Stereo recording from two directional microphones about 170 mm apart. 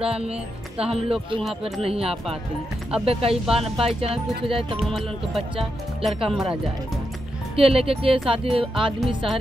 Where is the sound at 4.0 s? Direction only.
35° right (ahead or behind).